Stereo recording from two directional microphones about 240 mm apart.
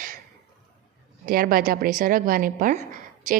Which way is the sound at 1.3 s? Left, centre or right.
Right.